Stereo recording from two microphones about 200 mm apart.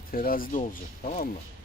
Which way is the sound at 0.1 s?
45° left (ahead or behind).